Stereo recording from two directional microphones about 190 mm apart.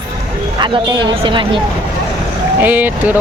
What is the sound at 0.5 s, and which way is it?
Speech, 25° right (ahead or behind).